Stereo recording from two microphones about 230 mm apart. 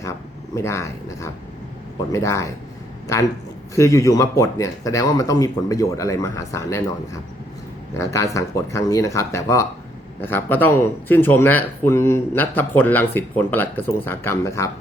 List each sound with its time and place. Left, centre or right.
0.0 s a sound: centre
2.1 s speech: centre
3.8 s speech: centre